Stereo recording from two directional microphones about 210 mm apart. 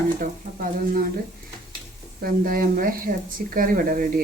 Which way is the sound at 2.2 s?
45° right (ahead or behind).